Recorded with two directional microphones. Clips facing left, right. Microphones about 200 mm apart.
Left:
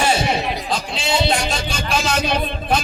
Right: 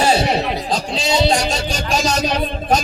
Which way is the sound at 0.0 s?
35° right (ahead or behind).